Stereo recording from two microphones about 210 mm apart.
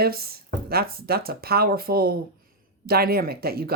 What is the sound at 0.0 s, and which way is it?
Speech, 45° right (ahead or behind).